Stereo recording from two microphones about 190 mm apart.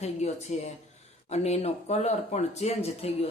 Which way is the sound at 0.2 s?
35° left (ahead or behind).